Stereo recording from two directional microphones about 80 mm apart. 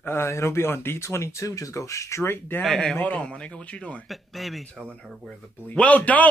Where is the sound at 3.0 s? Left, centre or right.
Centre.